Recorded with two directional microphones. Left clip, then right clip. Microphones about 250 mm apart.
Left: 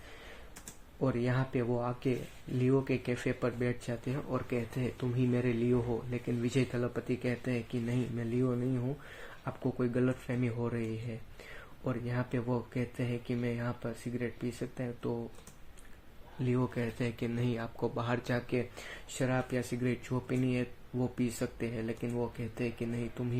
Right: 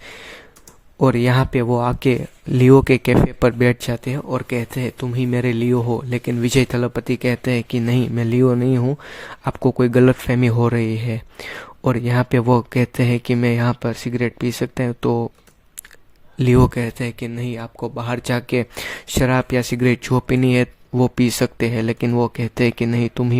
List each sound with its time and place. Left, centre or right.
0.9 s speech: right
16.4 s speech: right